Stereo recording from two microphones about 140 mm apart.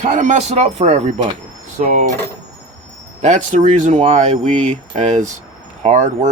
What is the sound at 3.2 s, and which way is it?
Speech, 60° right (ahead or behind).